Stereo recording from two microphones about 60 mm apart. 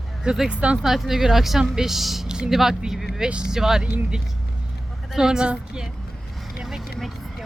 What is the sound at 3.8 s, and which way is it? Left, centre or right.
Speech, right.